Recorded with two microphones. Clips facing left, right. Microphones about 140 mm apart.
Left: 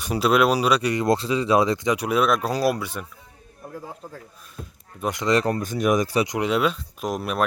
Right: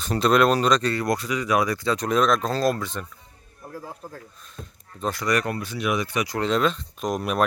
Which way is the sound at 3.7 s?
5° right (ahead or behind).